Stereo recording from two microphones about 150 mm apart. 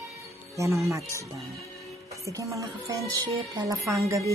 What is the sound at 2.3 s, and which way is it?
Speech, 20° right (ahead or behind).